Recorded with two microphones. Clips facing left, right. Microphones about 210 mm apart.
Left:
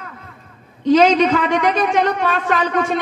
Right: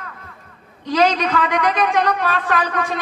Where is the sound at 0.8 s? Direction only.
25° left (ahead or behind).